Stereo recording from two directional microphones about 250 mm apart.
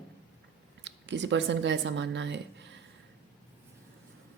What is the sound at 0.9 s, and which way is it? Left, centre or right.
Speech, right.